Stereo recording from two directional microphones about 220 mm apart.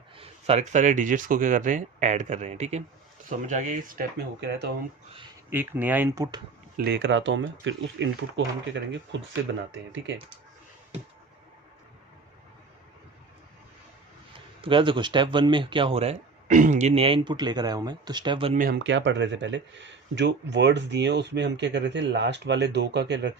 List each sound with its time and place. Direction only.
0.2 s speech: 30° right (ahead or behind)
4.4 s speech: 50° right (ahead or behind)
5.5 s speech: 10° right (ahead or behind)
6.7 s speech: 50° right (ahead or behind)
14.3 s speech: 25° right (ahead or behind)
18.5 s speech: 40° right (ahead or behind)
18.8 s speech: 55° right (ahead or behind)